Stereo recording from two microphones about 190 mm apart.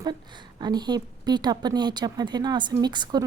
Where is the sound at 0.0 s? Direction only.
25° right (ahead or behind).